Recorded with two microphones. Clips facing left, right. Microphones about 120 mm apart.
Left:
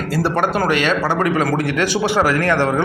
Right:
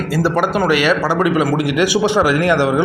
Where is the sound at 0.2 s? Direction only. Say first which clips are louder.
Right 2 dB; centre (ahead or behind).